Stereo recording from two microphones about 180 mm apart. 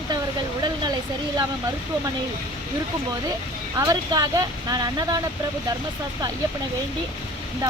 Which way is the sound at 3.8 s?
20° right (ahead or behind).